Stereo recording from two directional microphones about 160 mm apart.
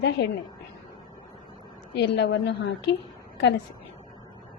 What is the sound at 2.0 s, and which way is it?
Speech, 90° left.